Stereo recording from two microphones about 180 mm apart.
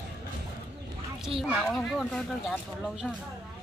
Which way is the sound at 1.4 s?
Centre (ahead or behind).